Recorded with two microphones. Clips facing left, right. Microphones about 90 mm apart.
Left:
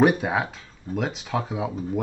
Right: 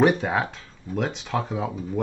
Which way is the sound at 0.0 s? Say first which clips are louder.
Even; 5° left (ahead or behind).